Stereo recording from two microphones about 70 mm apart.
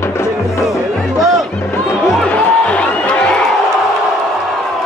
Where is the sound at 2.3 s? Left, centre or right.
Centre.